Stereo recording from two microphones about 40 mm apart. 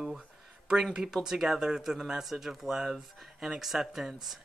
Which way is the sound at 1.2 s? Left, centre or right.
Centre.